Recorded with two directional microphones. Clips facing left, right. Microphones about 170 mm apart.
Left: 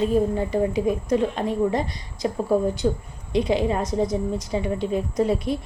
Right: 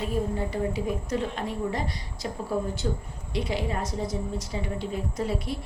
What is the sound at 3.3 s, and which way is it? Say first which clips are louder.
A woman's voice: left 8 dB; 20° left (ahead or behind).